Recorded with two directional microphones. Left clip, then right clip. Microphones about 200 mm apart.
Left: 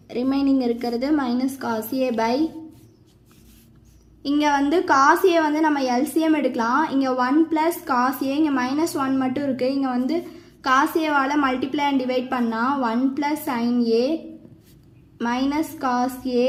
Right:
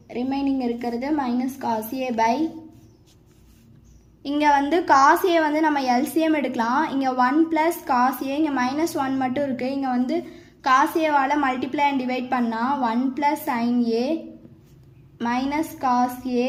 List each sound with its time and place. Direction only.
0.1 s a woman's voice: 25° left (ahead or behind)
4.2 s a woman's voice: 20° left (ahead or behind)
15.2 s a woman's voice: 20° left (ahead or behind)